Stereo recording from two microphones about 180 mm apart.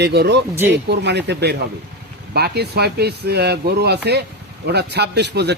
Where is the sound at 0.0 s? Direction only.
65° right (ahead or behind).